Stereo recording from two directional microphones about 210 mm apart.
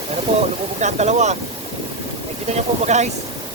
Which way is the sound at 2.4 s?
30° right (ahead or behind).